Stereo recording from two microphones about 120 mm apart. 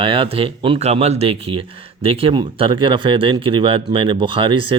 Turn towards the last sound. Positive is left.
turn(degrees=-45)  # may be behind; listen again after turning